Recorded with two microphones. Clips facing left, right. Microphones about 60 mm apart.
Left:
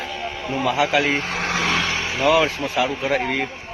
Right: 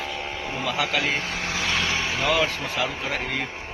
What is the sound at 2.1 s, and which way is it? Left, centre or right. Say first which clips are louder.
Speech: left 8 dB; centre.